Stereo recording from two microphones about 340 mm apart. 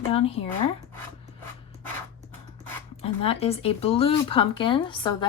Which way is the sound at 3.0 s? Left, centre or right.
Centre.